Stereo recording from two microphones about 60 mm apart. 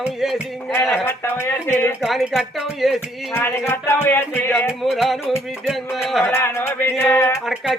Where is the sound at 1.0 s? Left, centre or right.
Left.